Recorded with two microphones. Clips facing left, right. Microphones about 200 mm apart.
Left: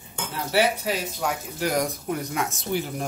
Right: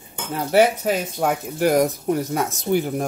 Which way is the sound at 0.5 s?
50° right (ahead or behind).